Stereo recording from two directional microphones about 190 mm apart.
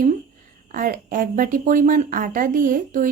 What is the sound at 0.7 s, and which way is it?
A woman's voice, 45° right (ahead or behind).